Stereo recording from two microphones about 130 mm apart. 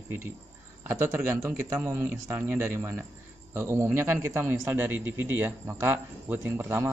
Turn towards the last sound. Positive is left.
turn(degrees=-20)  # may be behind; listen again after turning